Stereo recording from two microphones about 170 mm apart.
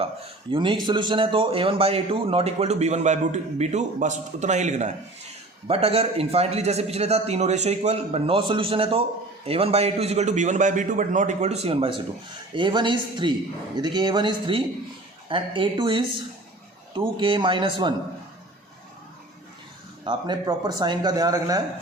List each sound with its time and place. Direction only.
0.5 s a man's voice: 30° right (ahead or behind)
20.1 s speech: 25° right (ahead or behind)